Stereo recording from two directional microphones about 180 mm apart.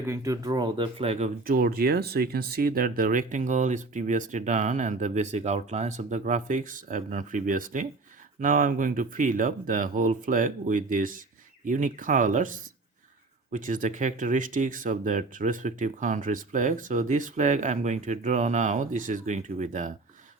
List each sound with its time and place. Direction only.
0.0 s speech: 15° right (ahead or behind); by 1.3 s 35° right (ahead or behind)
1.5 s speech: 55° right (ahead or behind)